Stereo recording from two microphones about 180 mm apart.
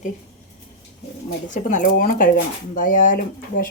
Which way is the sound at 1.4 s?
45° left (ahead or behind).